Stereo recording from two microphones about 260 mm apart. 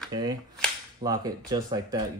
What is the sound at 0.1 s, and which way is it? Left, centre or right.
Cap gun, centre.